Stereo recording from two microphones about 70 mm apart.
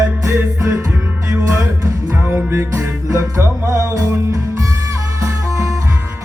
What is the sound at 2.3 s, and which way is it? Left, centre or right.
Music, right.